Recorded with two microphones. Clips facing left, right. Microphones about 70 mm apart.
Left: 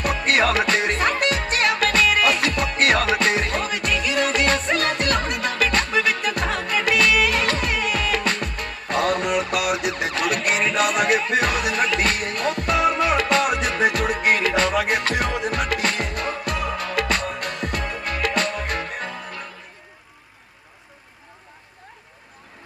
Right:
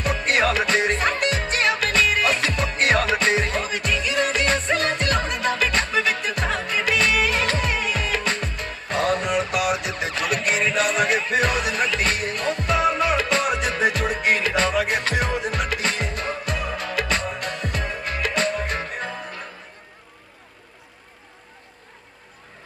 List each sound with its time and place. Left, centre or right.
0.7 s music: right
14.7 s music: left
15.0 s music: right